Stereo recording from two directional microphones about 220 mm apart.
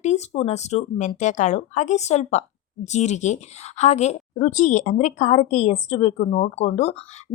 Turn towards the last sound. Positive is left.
turn(degrees=30)  # may be behind; listen again after turning